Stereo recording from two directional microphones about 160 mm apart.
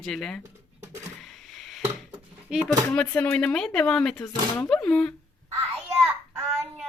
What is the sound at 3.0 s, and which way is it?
Speech, 10° left (ahead or behind).